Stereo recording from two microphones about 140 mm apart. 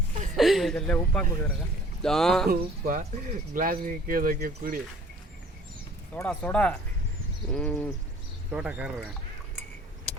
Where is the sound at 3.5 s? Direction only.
85° right.